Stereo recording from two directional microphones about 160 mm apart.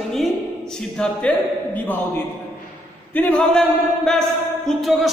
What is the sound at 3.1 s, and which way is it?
A man's voice, 10° left (ahead or behind).